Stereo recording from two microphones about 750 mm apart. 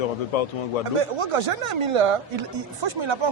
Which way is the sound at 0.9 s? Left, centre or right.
Right.